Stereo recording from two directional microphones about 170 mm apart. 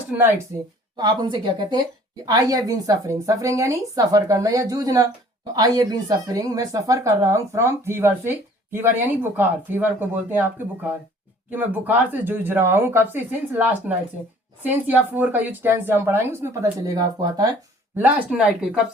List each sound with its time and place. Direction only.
0.9 s a woman's voice: 25° right (ahead or behind)
11.5 s speech: 10° right (ahead or behind)
17.9 s speech: 10° right (ahead or behind)